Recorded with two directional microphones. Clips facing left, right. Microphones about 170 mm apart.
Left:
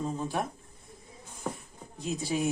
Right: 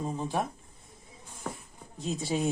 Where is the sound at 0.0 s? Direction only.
20° right (ahead or behind).